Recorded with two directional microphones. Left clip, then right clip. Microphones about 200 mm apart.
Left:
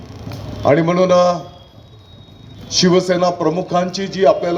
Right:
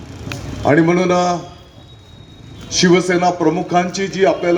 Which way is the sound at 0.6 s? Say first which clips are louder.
Even; 35° left (ahead or behind).